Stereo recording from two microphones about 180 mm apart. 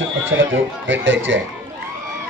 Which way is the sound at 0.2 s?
90° right.